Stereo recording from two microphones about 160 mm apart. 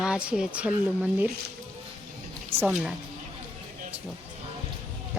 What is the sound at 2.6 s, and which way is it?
Speech, 10° right (ahead or behind).